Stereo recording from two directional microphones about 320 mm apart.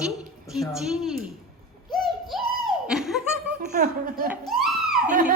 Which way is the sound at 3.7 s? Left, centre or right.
Right.